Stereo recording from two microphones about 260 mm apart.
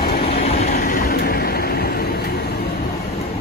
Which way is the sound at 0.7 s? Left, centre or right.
Left.